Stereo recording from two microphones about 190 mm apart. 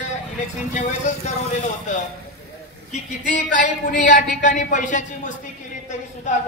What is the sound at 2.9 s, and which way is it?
Speech, 40° left (ahead or behind).